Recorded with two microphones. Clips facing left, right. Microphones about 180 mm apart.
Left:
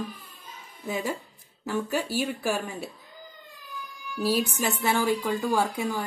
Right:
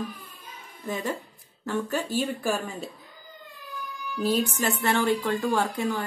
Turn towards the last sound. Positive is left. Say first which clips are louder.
# even
turn(degrees=10)  # may be behind; listen again after turning